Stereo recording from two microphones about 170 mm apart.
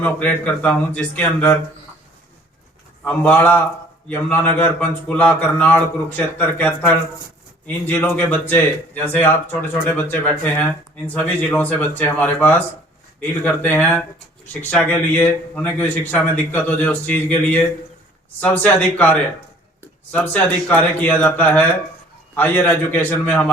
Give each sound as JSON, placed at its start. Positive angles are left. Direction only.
{"t": 0.0, "sound": "speech", "side_deg": 10}
{"t": 3.0, "sound": "speech", "side_deg": 10}